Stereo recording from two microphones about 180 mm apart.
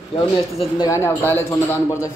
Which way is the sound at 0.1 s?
30° left (ahead or behind).